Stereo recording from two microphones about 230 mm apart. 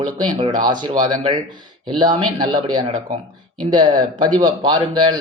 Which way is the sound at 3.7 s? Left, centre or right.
Centre.